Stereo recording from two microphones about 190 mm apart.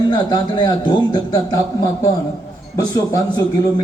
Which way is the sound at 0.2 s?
20° left (ahead or behind).